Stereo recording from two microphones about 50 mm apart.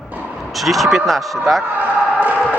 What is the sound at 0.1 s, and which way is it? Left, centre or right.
Vehicle, right.